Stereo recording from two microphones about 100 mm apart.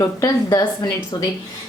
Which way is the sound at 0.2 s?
35° left (ahead or behind).